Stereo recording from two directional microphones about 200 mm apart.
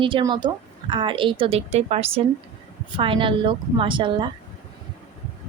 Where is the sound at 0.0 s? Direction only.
25° right (ahead or behind).